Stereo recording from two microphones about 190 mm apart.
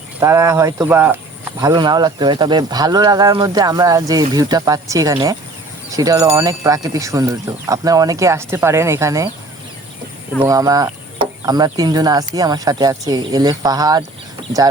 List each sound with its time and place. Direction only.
0.2 s speech: 15° right (ahead or behind)
1.6 s speech: 20° right (ahead or behind)
10.3 s speech: 15° right (ahead or behind)